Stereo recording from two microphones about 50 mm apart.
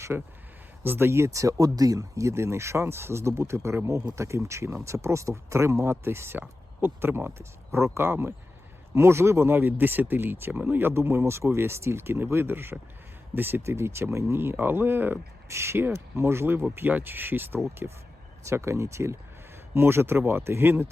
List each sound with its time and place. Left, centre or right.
0.1 s speech: centre
0.8 s speech: right
3.8 s speech: right
7.9 s speech: right
9.6 s speech: right
13.7 s speech: right
14.5 s speech: right
15.4 s speech: right
16.9 s speech: right
17.8 s speech: right
18.4 s speech: right
19.7 s speech: right